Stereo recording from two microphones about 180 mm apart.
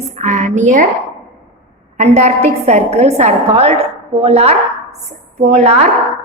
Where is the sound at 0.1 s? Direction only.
40° right (ahead or behind).